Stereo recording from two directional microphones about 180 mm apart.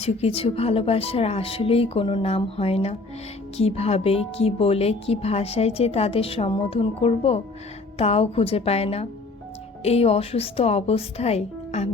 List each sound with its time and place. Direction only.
0.0 s speech: 35° left (ahead or behind)